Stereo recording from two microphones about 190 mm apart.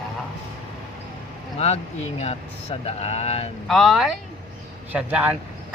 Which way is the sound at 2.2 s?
30° left (ahead or behind).